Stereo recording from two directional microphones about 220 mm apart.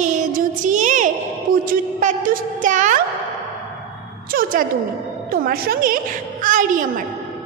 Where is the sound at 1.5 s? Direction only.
40° right (ahead or behind).